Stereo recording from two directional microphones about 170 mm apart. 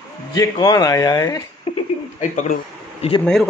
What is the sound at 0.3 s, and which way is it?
Speech, 25° left (ahead or behind).